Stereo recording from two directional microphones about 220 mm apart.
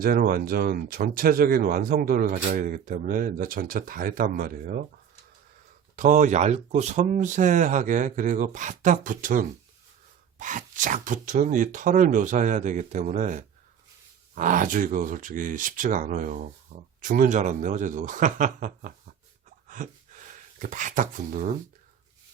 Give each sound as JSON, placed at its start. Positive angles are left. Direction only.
{"t": 0.0, "sound": "speech", "side_deg": -40}
{"t": 6.0, "sound": "speech", "side_deg": -35}
{"t": 19.6, "sound": "a sound", "side_deg": -35}